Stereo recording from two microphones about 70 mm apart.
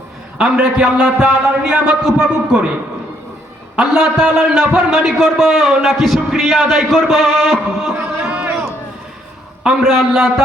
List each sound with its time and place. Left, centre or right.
0.3 s a man's voice: centre
3.8 s a man's voice: centre
7.9 s a sound: centre
9.6 s a man's voice: centre